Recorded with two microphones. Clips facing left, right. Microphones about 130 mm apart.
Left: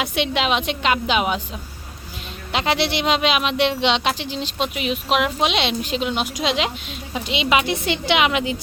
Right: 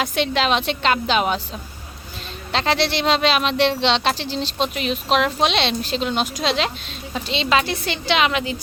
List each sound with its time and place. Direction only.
0.0 s speech: 10° left (ahead or behind)
2.5 s speech: 10° left (ahead or behind)